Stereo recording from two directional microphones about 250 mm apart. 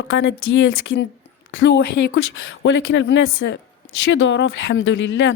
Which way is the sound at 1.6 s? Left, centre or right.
Left.